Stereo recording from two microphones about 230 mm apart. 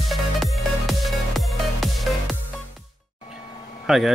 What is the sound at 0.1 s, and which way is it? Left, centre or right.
Music, centre.